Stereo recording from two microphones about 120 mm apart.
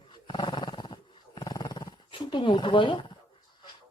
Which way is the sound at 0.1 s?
40° left (ahead or behind).